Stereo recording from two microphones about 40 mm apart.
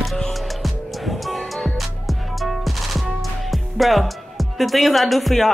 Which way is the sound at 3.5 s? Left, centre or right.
Centre.